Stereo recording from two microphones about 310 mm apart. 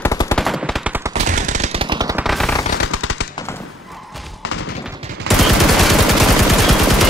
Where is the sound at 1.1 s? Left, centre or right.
Right.